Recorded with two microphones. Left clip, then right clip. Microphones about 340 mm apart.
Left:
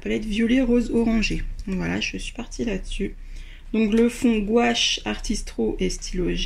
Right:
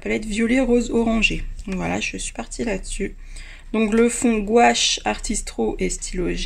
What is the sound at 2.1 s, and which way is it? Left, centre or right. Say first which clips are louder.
Speech: right 3 dB; right.